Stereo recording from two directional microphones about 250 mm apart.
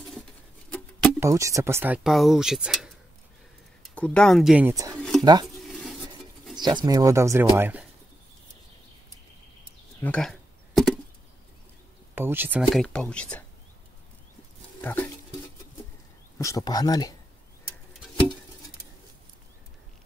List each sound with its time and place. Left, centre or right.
1.2 s speech: centre
5.7 s dishes: centre
6.5 s speech: centre
9.9 s a sound: centre
12.2 s speech: centre
14.8 s speech: centre
16.3 s speech: centre